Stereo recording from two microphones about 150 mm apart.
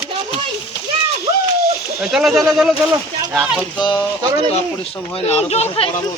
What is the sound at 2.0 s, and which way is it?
Speech, 5° right (ahead or behind).